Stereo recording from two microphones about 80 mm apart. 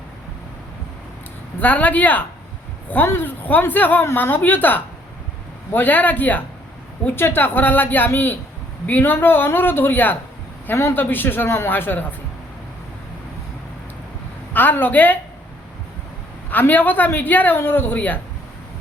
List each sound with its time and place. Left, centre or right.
1.6 s a woman's voice: centre
14.5 s a woman's voice: left
16.5 s a woman's voice: left